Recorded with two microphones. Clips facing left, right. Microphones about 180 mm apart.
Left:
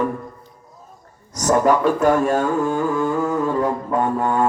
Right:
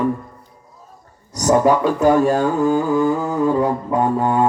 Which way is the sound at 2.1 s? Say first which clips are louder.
Right 2 dB; 35° right (ahead or behind).